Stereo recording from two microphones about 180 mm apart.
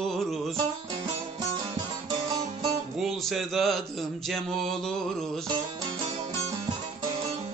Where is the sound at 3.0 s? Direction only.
Centre (ahead or behind).